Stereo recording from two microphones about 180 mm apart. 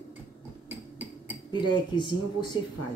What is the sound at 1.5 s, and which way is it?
A woman's voice, 25° left (ahead or behind).